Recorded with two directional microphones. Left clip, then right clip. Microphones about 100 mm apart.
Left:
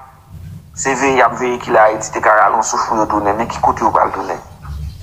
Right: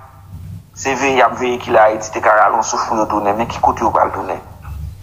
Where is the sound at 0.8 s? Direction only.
25° right (ahead or behind).